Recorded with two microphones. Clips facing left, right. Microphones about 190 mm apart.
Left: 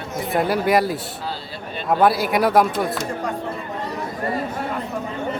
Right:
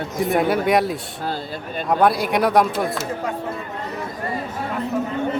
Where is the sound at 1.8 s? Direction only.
5° left (ahead or behind).